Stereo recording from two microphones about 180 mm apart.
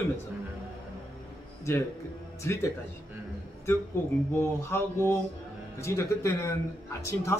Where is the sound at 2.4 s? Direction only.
15° left (ahead or behind).